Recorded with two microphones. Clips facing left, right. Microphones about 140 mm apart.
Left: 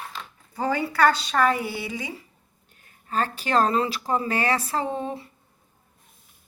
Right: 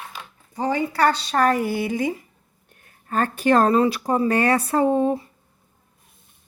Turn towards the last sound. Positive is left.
turn(degrees=-45)  # may be behind; listen again after turning